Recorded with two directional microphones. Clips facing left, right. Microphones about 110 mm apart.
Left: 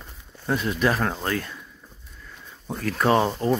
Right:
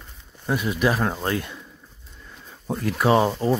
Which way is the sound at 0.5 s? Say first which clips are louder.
Right 1 dB; 5° right (ahead or behind).